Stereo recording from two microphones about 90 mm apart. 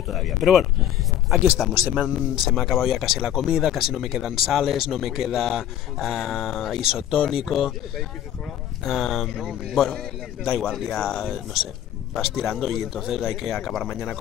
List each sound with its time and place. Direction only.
0.1 s speech: centre (ahead or behind)
8.8 s speech: centre (ahead or behind)